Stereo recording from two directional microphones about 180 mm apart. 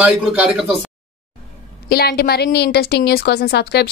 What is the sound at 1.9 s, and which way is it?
A woman's voice, 60° left (ahead or behind).